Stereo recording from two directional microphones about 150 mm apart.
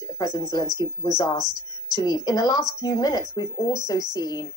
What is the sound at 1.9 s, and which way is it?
Speech, 25° left (ahead or behind).